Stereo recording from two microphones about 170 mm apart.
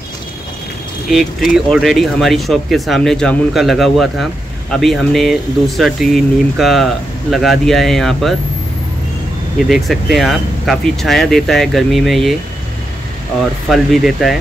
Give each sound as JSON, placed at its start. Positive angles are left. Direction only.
{"t": 1.1, "sound": "speech", "side_deg": 0}
{"t": 9.7, "sound": "speech", "side_deg": 0}
{"t": 13.7, "sound": "speech", "side_deg": 0}